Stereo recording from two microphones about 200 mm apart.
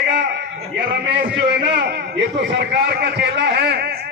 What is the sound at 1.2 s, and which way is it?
A man's voice, 55° right (ahead or behind).